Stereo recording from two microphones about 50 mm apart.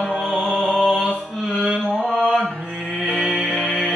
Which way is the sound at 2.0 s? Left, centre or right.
Right.